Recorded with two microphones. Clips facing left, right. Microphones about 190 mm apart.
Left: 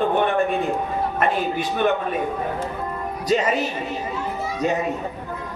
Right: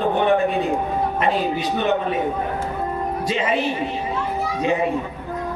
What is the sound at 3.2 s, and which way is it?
Speech, 40° left (ahead or behind).